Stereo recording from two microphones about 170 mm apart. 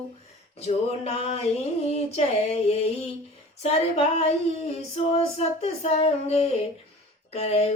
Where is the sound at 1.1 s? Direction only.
40° left (ahead or behind).